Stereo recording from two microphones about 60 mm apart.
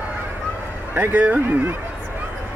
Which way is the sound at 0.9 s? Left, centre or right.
Right.